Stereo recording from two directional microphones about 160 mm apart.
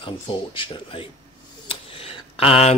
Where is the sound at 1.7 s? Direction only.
35° left (ahead or behind).